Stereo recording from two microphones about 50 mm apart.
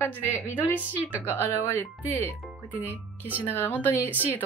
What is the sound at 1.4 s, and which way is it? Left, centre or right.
Speech, left.